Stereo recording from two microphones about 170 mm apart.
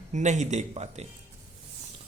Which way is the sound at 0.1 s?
45° right (ahead or behind).